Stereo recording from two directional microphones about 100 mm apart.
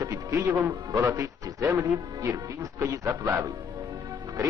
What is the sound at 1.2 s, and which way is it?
A man's voice, 30° right (ahead or behind).